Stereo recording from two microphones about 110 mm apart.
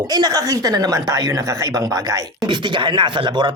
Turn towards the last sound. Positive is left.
turn(degrees=-45)  # may be behind; listen again after turning